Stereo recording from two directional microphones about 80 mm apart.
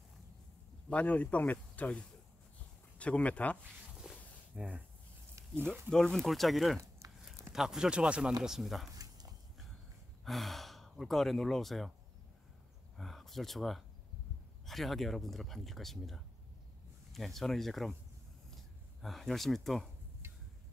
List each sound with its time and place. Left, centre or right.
0.8 s speech: centre
4.1 s a sound: centre
4.6 s speech: centre
5.9 s speech: centre
8.9 s a sound: right
10.2 s speech: centre
12.9 s speech: centre
18.9 s speech: centre